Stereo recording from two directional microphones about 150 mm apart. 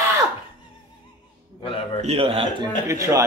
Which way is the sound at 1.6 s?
35° left (ahead or behind).